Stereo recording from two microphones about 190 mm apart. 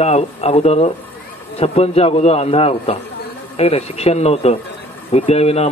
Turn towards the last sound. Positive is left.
turn(degrees=35)  # may be behind; listen again after turning